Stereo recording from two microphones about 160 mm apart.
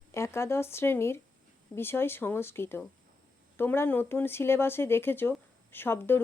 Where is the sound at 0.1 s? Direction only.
15° left (ahead or behind).